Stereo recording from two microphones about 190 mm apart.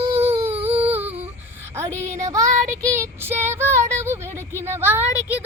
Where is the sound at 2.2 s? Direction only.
15° right (ahead or behind).